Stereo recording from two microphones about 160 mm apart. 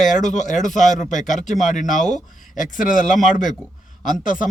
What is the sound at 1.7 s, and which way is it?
Speech, 50° left (ahead or behind).